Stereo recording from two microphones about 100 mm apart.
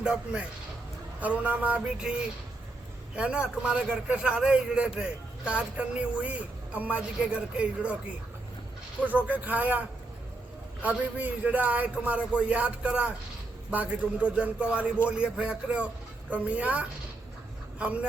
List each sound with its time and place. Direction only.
0.0 s a man's voice: 10° right (ahead or behind)
3.2 s a man's voice: 10° right (ahead or behind)
9.0 s a man's voice: 15° right (ahead or behind)
10.8 s a man's voice: 15° right (ahead or behind)